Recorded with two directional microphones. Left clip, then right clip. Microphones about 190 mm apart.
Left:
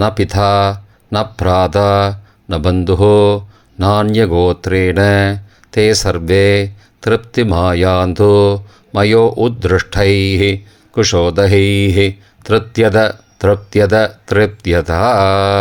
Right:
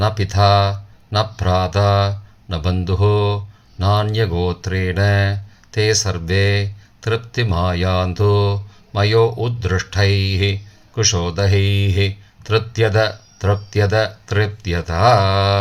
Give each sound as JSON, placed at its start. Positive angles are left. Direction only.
{"t": 0.0, "sound": "speech", "side_deg": 45}